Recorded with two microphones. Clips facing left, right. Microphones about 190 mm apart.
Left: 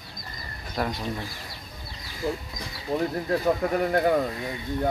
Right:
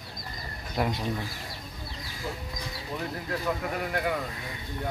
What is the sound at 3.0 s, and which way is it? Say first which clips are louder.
Speech: left 7 dB; 40° left (ahead or behind).